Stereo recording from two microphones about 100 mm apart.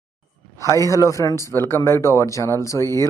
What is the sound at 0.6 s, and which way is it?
Speech, 30° left (ahead or behind).